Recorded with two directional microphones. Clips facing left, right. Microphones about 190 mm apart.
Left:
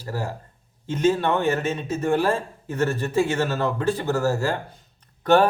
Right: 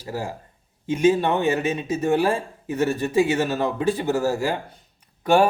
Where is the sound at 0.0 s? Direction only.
15° right (ahead or behind).